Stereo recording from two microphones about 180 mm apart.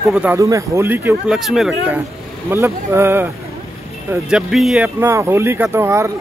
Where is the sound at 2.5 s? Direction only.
15° right (ahead or behind).